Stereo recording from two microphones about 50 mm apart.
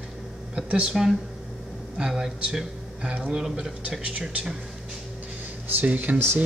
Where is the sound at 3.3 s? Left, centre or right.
Centre.